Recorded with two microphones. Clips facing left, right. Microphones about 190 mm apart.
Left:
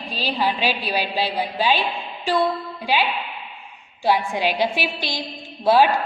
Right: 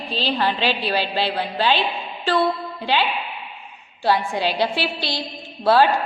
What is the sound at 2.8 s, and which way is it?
A woman's voice, 10° left (ahead or behind).